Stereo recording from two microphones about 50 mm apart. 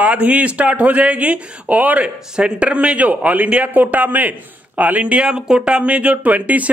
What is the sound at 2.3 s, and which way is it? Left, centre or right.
A man's voice, right.